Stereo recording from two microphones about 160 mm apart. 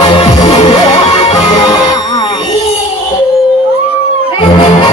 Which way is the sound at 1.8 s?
25° left (ahead or behind).